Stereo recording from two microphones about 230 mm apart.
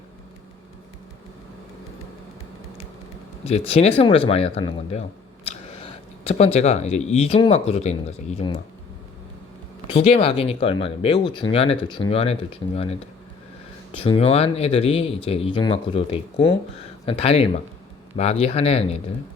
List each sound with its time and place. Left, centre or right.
3.7 s speech: left
9.9 s speech: left